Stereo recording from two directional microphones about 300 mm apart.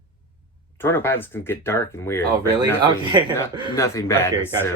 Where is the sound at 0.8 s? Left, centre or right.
Centre.